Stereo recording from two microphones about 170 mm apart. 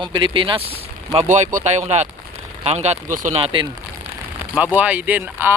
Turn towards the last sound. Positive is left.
turn(degrees=-10)  # may be behind; listen again after turning